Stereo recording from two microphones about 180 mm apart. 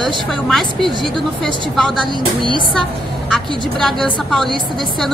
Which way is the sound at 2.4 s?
25° left (ahead or behind).